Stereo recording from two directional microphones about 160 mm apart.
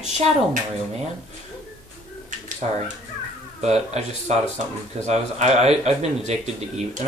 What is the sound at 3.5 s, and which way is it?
Speech, 40° right (ahead or behind).